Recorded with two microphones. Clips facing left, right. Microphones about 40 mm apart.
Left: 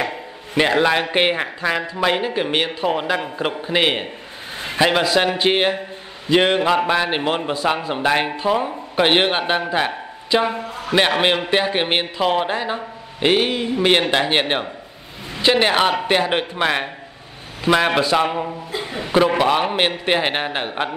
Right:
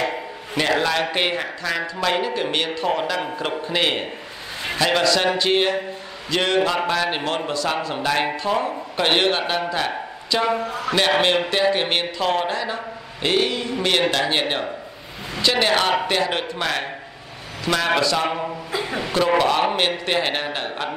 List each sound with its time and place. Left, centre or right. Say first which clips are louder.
0.6 s a man's voice: left 4 dB; left